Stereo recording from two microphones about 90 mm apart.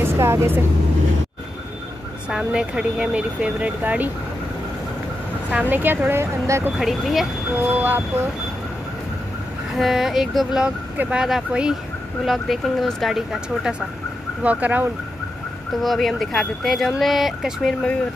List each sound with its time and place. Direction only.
0.0 s speech: 30° right (ahead or behind)
2.2 s speech: 10° right (ahead or behind)
5.5 s train: 20° right (ahead or behind)
6.8 s speech: centre (ahead or behind)
7.5 s train: 20° right (ahead or behind)
9.8 s speech: 5° right (ahead or behind)
14.4 s speech: 15° right (ahead or behind)
15.8 s speech: centre (ahead or behind)